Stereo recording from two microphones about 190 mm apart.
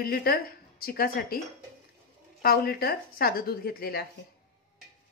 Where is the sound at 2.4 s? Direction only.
55° left (ahead or behind).